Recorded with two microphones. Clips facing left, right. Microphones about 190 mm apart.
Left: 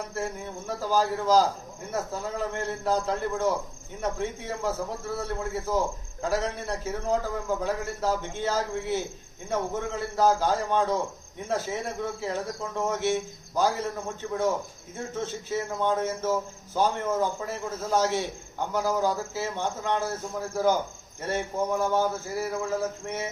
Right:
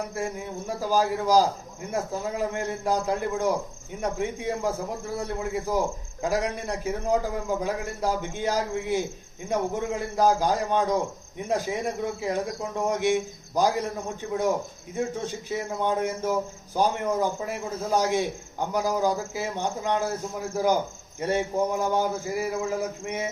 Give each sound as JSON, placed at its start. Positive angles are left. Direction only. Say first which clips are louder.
{"t": 0.7, "sound": "speech", "louder": "right 1 dB", "side_deg": -10}
{"t": 14.9, "sound": "speech", "louder": "right 3 dB", "side_deg": -15}
{"t": 21.2, "sound": "speech", "louder": "right 4 dB", "side_deg": -15}